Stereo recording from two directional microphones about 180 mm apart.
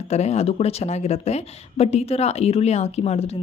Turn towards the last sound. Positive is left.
turn(degrees=35)  # may be behind; listen again after turning